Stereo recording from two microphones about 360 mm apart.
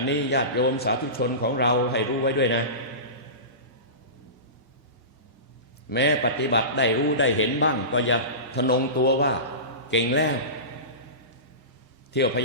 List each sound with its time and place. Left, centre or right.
0.1 s a man's voice: left
5.9 s a man's voice: left
12.1 s a man's voice: left